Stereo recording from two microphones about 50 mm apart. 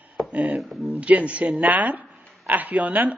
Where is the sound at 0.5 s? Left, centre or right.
Centre.